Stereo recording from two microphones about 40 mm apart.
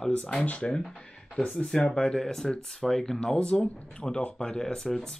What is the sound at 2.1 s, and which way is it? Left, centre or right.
Speech, centre.